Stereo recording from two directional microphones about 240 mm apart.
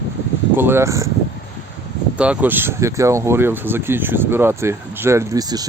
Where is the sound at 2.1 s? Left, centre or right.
Centre.